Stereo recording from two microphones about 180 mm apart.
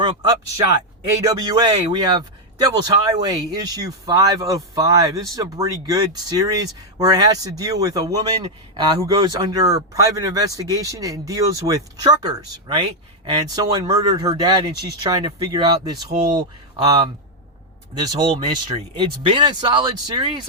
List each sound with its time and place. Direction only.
0.0 s speech: 20° right (ahead or behind)